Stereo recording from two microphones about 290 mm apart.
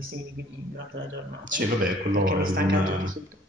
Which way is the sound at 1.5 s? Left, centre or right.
Right.